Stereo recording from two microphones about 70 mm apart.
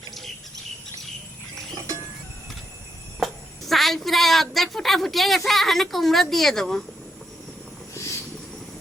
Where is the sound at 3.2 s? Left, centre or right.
Centre.